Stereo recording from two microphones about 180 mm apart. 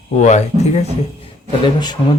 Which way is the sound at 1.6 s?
25° left (ahead or behind).